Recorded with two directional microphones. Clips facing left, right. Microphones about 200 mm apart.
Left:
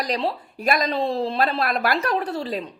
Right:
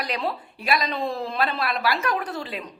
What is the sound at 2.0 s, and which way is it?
Speech, 30° left (ahead or behind).